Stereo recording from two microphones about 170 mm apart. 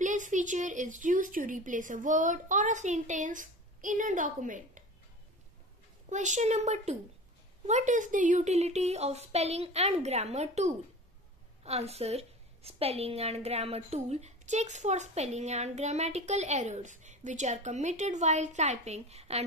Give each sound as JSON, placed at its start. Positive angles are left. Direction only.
{"t": 0.0, "sound": "a woman's voice", "side_deg": -45}
{"t": 6.0, "sound": "a woman's voice", "side_deg": -45}